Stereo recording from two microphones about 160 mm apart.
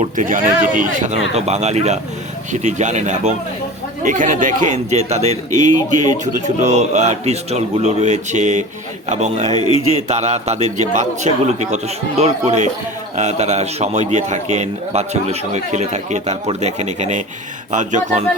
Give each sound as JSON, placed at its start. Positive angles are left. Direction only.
{"t": 0.0, "sound": "speech", "side_deg": -55}
{"t": 9.6, "sound": "speech", "side_deg": 35}
{"t": 10.1, "sound": "speech", "side_deg": -45}